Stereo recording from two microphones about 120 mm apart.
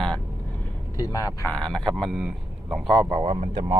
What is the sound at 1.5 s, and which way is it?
Speech, 10° left (ahead or behind).